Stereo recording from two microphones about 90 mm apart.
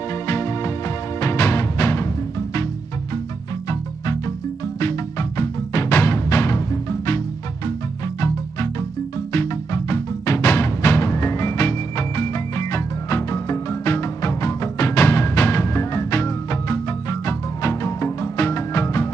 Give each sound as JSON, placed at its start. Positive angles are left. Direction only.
{"t": 0.3, "sound": "music", "side_deg": 40}
{"t": 5.4, "sound": "music", "side_deg": 35}
{"t": 9.3, "sound": "music", "side_deg": 35}